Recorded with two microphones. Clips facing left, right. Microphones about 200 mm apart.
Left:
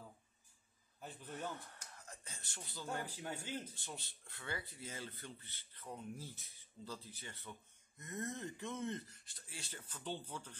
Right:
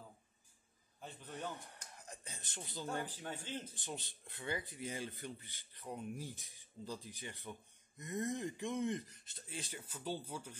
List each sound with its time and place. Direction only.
1.3 s speech: 15° right (ahead or behind)
2.0 s a sound: 15° right (ahead or behind)
3.1 s speech: 10° left (ahead or behind)
3.7 s speech: 15° right (ahead or behind)